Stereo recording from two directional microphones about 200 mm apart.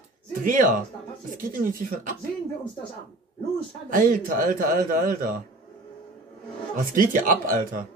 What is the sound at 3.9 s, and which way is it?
A man's voice, 40° right (ahead or behind).